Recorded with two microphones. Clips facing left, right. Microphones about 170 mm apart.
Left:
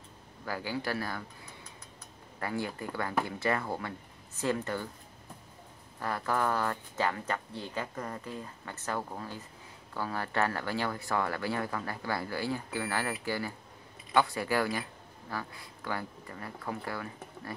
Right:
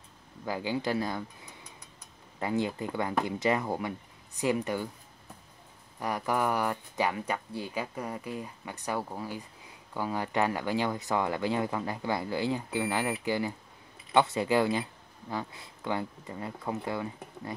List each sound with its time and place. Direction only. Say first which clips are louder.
0.5 s speech: right 4 dB; 20° right (ahead or behind)
2.4 s speech: right 5 dB; 20° right (ahead or behind)
5.9 s speech: right 2 dB; 15° right (ahead or behind)